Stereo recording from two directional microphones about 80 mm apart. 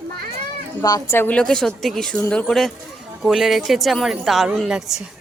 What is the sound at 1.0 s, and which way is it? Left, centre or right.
Speech, left.